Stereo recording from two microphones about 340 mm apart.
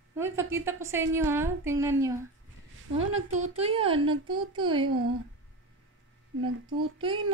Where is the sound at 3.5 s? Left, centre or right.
Centre.